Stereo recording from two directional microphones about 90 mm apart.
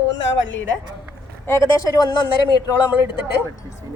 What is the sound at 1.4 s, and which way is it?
A woman's voice, 30° left (ahead or behind).